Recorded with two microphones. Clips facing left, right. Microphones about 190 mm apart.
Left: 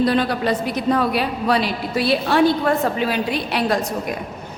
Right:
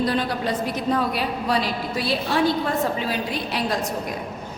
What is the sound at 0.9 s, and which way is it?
A woman's voice, 70° left (ahead or behind).